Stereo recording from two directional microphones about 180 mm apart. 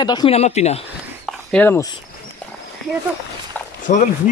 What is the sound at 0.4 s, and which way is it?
Speech, 35° left (ahead or behind).